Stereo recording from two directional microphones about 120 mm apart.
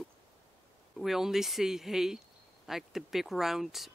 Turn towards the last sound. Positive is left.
turn(degrees=0)  # may be behind; listen again after turning